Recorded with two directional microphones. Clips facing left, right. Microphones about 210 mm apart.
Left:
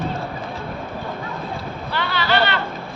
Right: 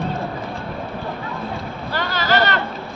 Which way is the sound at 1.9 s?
45° right (ahead or behind).